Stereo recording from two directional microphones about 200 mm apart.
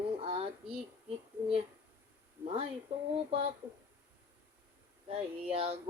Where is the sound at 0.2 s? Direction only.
30° right (ahead or behind).